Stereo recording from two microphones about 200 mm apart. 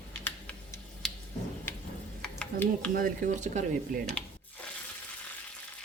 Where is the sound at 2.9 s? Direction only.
45° right (ahead or behind).